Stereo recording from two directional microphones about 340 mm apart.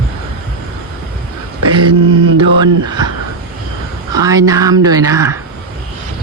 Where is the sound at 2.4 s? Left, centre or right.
Right.